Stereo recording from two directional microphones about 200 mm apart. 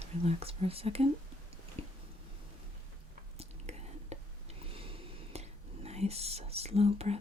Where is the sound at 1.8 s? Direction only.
30° right (ahead or behind).